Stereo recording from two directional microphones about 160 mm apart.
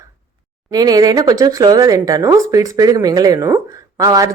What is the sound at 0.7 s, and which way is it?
Speech, 25° right (ahead or behind).